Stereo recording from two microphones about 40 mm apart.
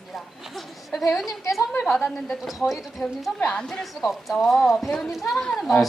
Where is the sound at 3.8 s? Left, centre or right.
Centre.